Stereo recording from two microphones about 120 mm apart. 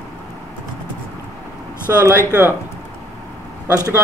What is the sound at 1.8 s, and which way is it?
Speech, 20° right (ahead or behind).